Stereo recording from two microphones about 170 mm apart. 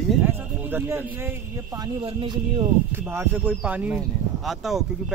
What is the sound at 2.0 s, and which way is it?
Speech, 30° right (ahead or behind).